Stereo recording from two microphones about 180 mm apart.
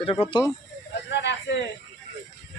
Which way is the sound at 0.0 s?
30° left (ahead or behind).